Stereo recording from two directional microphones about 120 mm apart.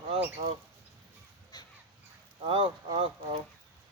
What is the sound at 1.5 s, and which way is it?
Crow, 35° left (ahead or behind).